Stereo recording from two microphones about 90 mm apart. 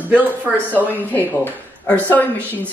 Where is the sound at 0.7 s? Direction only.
20° left (ahead or behind).